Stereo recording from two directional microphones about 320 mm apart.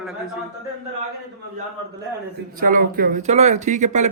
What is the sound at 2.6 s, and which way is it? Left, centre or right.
Speech, right.